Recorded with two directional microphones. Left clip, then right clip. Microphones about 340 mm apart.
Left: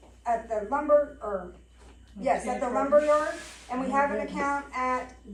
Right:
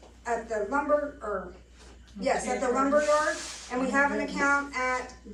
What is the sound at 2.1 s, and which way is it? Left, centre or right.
Speech, centre.